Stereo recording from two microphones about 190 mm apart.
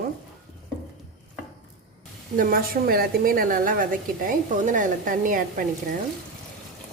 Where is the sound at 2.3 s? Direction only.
50° right (ahead or behind).